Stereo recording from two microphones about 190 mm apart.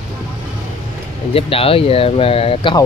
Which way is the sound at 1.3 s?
30° left (ahead or behind).